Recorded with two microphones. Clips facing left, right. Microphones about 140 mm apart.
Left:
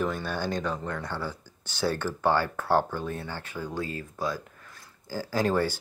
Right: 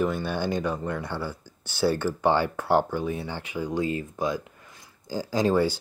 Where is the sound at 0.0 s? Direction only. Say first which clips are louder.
Right 3 dB; 10° right (ahead or behind).